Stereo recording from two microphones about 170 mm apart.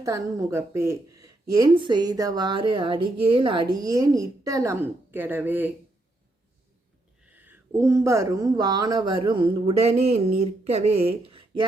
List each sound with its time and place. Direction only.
0.0 s a woman's voice: 20° right (ahead or behind)
7.2 s a woman's voice: 10° right (ahead or behind); by 11.3 s 35° right (ahead or behind)